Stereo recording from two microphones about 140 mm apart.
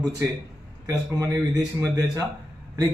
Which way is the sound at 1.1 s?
25° right (ahead or behind).